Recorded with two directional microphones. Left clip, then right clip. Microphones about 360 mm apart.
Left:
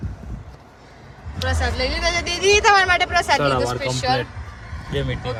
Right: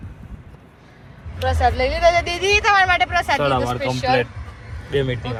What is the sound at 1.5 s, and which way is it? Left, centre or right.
Speech, centre.